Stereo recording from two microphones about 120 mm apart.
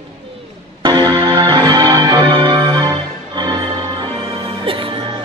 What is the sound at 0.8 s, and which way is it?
Music, 35° right (ahead or behind).